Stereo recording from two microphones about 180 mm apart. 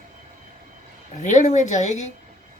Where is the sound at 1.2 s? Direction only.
40° left (ahead or behind).